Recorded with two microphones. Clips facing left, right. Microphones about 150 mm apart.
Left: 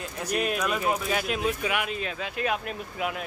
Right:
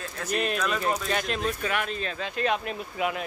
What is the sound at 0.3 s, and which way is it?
Speech, 10° left (ahead or behind).